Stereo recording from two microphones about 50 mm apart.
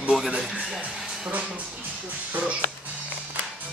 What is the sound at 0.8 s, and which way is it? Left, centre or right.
Speech, right.